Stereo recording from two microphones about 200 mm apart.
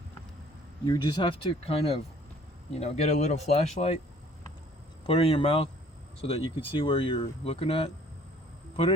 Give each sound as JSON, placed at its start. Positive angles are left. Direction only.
{"t": 0.9, "sound": "speech", "side_deg": 20}
{"t": 5.0, "sound": "speech", "side_deg": 30}